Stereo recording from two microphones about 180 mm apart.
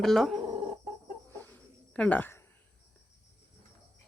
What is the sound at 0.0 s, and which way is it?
Speech, centre (ahead or behind).